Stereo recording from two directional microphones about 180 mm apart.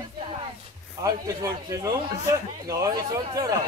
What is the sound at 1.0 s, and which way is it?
Speech, 20° right (ahead or behind).